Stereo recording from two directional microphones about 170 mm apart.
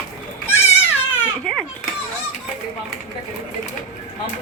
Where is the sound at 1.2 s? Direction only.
5° left (ahead or behind).